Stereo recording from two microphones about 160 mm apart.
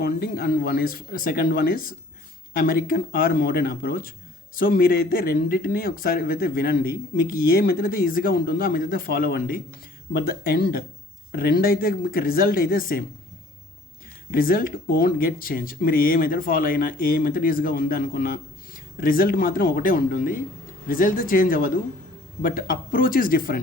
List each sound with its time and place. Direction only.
0.0 s speech: 75° left (ahead or behind)
14.3 s speech: 65° left (ahead or behind)